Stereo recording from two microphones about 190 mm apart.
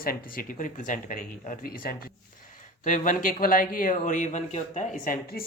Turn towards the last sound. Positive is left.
turn(degrees=45)  # may be behind; listen again after turning